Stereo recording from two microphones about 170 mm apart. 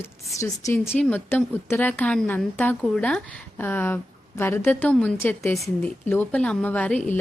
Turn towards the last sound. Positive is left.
turn(degrees=10)  # may be behind; listen again after turning